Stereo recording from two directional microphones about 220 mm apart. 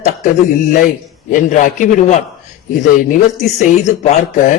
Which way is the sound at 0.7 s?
35° left (ahead or behind).